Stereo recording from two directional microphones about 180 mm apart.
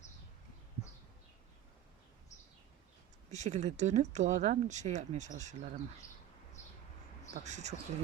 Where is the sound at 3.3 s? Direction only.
40° right (ahead or behind).